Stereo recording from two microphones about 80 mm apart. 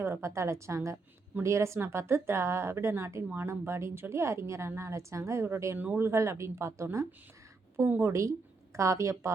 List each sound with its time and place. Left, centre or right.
0.0 s a woman's voice: right
8.1 s a woman's voice: right